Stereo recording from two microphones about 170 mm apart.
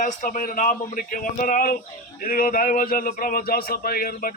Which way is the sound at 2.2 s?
55° left (ahead or behind).